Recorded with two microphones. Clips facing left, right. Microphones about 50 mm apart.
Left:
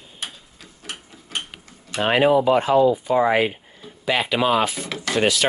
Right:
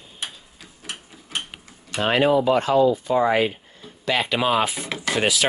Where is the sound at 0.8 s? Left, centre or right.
Centre.